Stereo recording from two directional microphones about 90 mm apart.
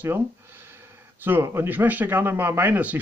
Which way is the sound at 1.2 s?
25° right (ahead or behind).